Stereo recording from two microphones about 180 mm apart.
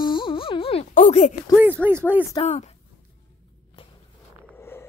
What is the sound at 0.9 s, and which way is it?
Speech, 40° left (ahead or behind).